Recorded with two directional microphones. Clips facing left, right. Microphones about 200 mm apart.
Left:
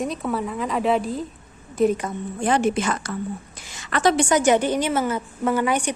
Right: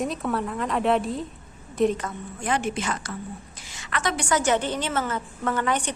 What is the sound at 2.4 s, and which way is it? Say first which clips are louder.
Speech: left 6 dB; 35° left (ahead or behind).